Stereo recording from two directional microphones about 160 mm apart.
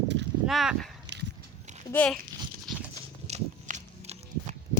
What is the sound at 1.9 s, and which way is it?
Speech, 10° left (ahead or behind).